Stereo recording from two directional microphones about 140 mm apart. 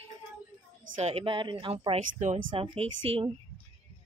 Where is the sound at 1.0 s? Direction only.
50° right (ahead or behind).